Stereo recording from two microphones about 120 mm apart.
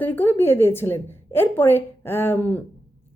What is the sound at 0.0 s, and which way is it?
A woman's voice, 15° left (ahead or behind).